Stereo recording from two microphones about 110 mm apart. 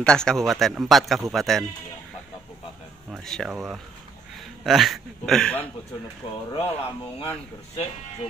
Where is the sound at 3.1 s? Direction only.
5° left (ahead or behind).